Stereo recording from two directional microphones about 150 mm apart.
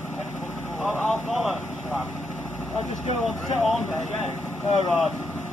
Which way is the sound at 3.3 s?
Centre (ahead or behind).